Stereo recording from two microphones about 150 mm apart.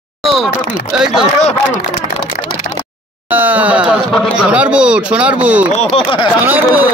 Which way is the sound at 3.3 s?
10° right (ahead or behind).